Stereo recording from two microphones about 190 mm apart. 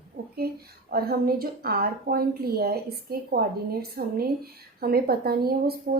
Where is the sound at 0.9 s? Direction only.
55° right (ahead or behind).